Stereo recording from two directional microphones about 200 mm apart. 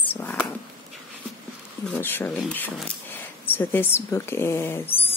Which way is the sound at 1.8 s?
10° left (ahead or behind).